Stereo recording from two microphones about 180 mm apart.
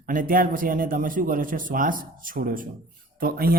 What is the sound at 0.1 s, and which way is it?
A man's voice, 50° right (ahead or behind).